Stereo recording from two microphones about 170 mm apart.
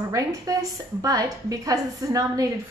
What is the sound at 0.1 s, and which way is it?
A woman's voice, 20° right (ahead or behind).